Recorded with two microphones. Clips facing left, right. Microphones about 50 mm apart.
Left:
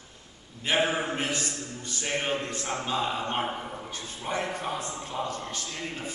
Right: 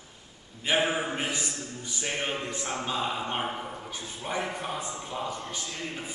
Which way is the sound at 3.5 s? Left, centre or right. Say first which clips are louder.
Left 1 dB; centre.